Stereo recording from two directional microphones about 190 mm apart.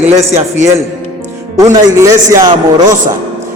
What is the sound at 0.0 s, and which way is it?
Speech, 15° right (ahead or behind).